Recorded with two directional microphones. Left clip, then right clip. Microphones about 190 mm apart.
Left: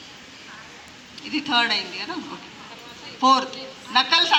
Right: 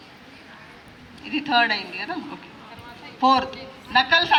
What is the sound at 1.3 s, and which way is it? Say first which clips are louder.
A man's voice: right 1 dB; 10° right (ahead or behind).